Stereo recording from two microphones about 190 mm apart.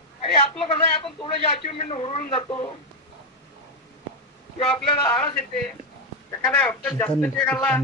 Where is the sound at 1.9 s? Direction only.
30° left (ahead or behind).